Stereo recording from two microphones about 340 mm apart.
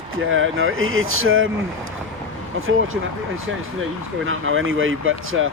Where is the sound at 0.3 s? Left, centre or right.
Right.